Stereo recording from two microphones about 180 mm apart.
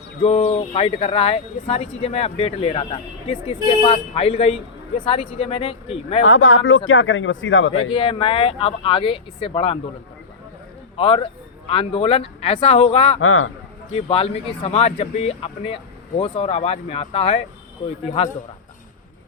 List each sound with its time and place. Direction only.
0.2 s speech: 35° left (ahead or behind)
6.2 s speech: 90° left
7.9 s speech: 30° left (ahead or behind)
10.9 s speech: 30° left (ahead or behind)